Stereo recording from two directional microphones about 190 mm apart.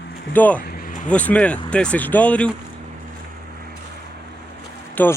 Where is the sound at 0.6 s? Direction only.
50° left (ahead or behind).